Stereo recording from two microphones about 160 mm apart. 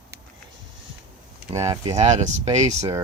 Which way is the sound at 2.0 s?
45° right (ahead or behind).